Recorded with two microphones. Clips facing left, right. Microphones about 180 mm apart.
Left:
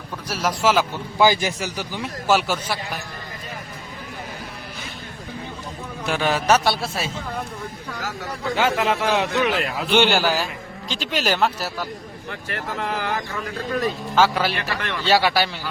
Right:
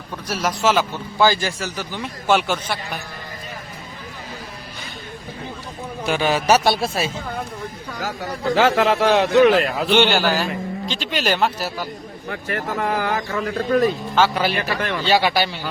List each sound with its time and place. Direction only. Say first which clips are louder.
0.3 s a man's voice: right 1 dB; 5° left (ahead or behind)
6.1 s speech: right 2 dB; centre (ahead or behind)
6.7 s speech: right 4 dB; 15° right (ahead or behind)
8.5 s speech: right 4 dB; 30° right (ahead or behind)
9.9 s speech: right 1 dB; 5° left (ahead or behind)
12.3 s speech: right 5 dB; 50° right (ahead or behind)
14.2 s speech: even; centre (ahead or behind)
14.5 s speech: right 4 dB; 45° right (ahead or behind)
15.0 s speech: even; centre (ahead or behind)